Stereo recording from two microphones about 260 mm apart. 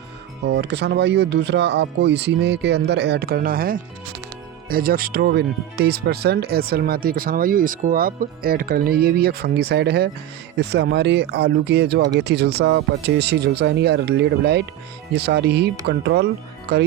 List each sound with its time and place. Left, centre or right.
0.4 s speech: right